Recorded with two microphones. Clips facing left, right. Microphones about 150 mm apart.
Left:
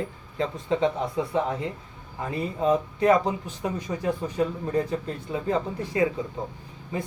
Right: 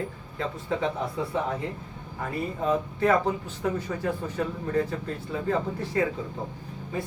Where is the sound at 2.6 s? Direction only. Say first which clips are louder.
Left 3 dB; 15° left (ahead or behind).